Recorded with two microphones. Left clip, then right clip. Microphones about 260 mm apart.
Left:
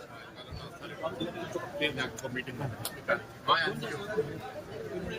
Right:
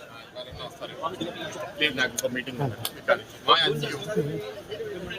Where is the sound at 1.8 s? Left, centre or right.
Centre.